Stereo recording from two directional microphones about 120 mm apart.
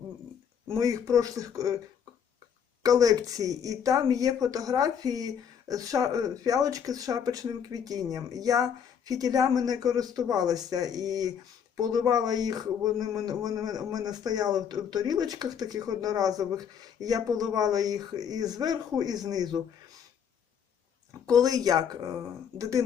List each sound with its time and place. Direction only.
0.8 s speech: 25° right (ahead or behind)
2.8 s speech: 30° right (ahead or behind)
21.2 s speech: 30° right (ahead or behind)